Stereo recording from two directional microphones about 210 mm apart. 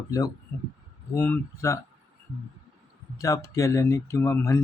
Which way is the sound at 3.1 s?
15° left (ahead or behind).